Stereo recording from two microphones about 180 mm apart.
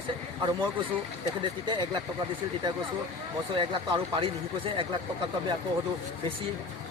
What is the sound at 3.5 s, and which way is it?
Speech, 30° right (ahead or behind).